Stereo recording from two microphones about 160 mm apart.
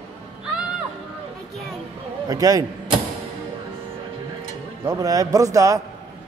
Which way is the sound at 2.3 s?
20° right (ahead or behind).